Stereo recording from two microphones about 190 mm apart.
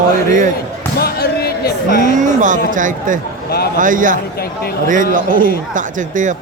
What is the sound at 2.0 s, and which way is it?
A man's voice, 40° right (ahead or behind).